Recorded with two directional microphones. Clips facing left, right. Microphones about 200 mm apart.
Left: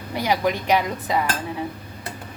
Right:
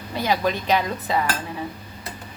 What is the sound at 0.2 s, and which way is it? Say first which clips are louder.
Speech: even; 15° left (ahead or behind).